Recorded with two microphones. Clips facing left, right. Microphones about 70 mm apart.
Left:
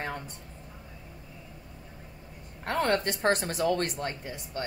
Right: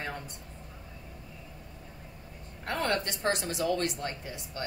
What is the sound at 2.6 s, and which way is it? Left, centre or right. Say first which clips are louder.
Speech: left 4 dB; left.